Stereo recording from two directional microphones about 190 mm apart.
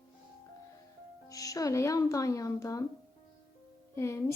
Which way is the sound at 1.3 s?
20° left (ahead or behind).